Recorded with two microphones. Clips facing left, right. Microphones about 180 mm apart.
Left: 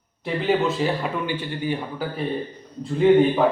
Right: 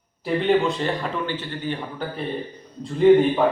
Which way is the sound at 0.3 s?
Centre (ahead or behind).